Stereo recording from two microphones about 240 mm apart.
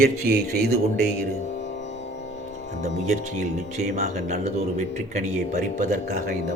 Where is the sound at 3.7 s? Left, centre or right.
Right.